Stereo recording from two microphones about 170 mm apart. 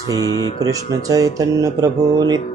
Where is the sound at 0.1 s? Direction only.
20° left (ahead or behind).